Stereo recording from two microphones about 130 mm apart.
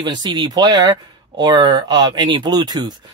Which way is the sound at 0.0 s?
35° right (ahead or behind).